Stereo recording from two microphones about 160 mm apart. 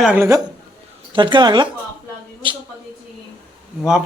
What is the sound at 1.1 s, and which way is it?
Speech, 30° right (ahead or behind).